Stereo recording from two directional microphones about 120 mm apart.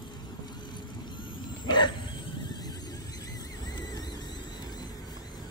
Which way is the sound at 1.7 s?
40° left (ahead or behind).